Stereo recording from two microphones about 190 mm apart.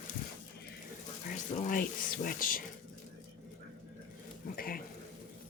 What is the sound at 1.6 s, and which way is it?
Speech, 45° left (ahead or behind).